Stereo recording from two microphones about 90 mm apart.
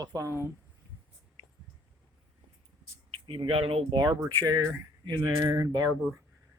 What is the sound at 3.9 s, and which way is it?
Speech, 50° right (ahead or behind).